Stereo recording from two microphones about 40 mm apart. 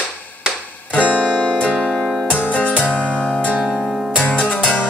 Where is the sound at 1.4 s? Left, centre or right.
Left.